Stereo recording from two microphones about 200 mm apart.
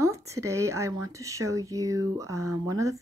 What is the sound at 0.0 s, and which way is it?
Speech, 15° right (ahead or behind).